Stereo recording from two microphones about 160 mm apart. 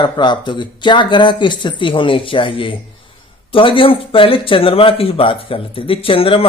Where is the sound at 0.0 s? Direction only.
30° left (ahead or behind).